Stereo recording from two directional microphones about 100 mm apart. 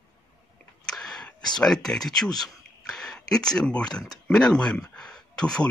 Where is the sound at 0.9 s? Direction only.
5° left (ahead or behind).